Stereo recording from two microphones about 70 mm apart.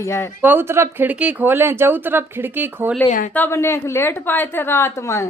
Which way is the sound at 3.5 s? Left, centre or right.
Left.